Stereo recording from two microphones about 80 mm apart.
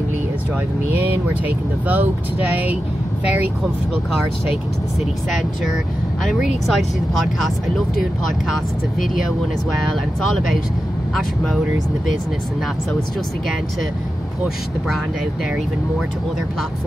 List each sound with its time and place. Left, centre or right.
1.9 s speech: right
6.2 s speech: centre